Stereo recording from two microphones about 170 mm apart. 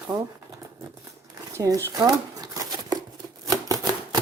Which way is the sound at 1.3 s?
20° right (ahead or behind).